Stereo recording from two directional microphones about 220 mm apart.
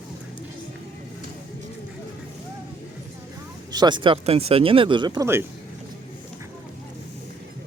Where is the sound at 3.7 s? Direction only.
20° right (ahead or behind).